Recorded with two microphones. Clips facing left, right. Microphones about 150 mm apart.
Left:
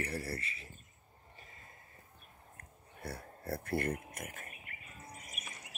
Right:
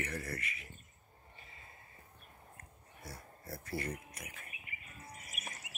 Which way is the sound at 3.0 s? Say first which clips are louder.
Left 8 dB; 60° left (ahead or behind).